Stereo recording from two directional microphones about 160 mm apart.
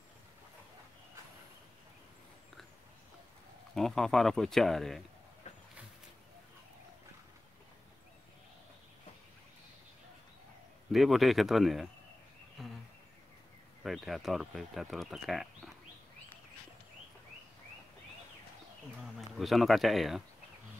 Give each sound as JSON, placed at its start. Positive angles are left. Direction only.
{"t": 3.7, "sound": "speech", "side_deg": 0}
{"t": 10.9, "sound": "speech", "side_deg": 0}
{"t": 12.6, "sound": "a sound", "side_deg": 0}
{"t": 13.8, "sound": "speech", "side_deg": 0}
{"t": 19.1, "sound": "speech", "side_deg": 0}